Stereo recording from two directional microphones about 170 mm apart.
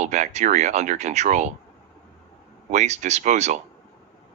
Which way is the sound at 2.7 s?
45° right (ahead or behind).